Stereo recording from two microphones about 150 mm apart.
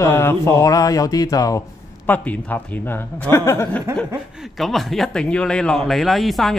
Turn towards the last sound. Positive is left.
turn(degrees=0)  # may be behind; listen again after turning